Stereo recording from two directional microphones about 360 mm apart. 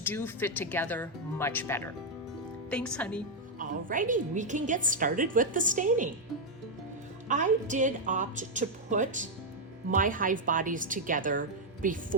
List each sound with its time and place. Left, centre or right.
0.0 s speech: centre
3.6 s a woman's voice: right
7.3 s a woman's voice: right